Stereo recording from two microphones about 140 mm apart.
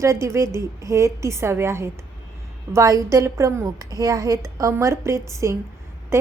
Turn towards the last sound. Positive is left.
turn(degrees=-20)  # may be behind; listen again after turning